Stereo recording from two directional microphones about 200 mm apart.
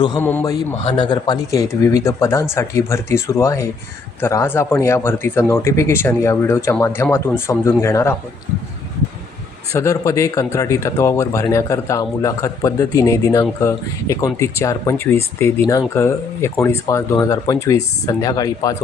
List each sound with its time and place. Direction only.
0.2 s speech: 10° left (ahead or behind)
9.7 s speech: 15° left (ahead or behind)